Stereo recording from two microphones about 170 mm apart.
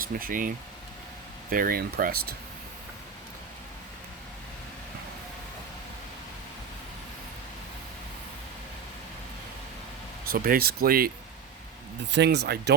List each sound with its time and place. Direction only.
0.0 s speech: 55° right (ahead or behind)
10.2 s speech: 60° right (ahead or behind)
12.1 s speech: 85° right